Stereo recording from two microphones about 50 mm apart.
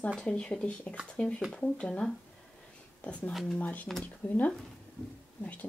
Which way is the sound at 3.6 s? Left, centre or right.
Left.